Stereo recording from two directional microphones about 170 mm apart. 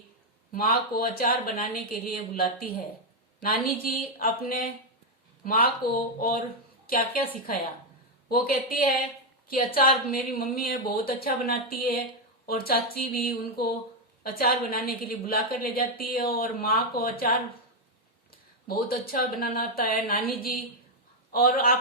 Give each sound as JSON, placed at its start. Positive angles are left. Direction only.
{"t": 0.5, "sound": "a woman's voice", "side_deg": 60}
{"t": 8.3, "sound": "a woman's voice", "side_deg": 60}